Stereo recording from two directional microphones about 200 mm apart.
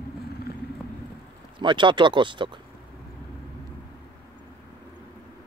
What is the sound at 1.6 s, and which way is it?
Speech, 25° right (ahead or behind).